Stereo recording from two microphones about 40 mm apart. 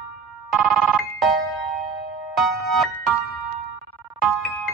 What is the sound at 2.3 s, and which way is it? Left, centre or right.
Music, centre.